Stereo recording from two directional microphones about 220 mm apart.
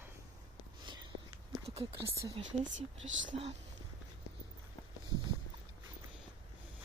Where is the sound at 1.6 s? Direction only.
25° right (ahead or behind).